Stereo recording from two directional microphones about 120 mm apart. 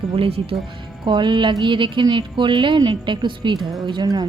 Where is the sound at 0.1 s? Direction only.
50° right (ahead or behind).